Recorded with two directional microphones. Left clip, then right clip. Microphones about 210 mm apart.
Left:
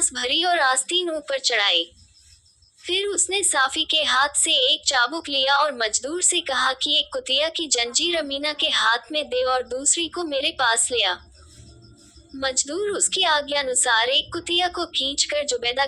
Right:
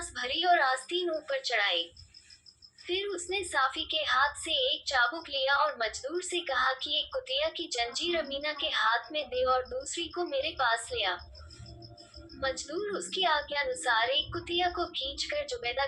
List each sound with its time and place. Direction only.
0.0 s a woman's voice: 50° left (ahead or behind)
2.8 s a woman's voice: 50° left (ahead or behind)
12.4 s a woman's voice: 50° left (ahead or behind)